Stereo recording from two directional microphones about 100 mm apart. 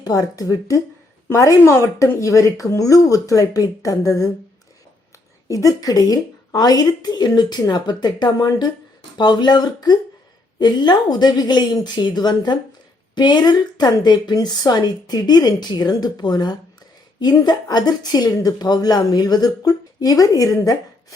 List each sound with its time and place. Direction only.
0.0 s speech: 40° left (ahead or behind)
5.5 s a woman's voice: 35° left (ahead or behind)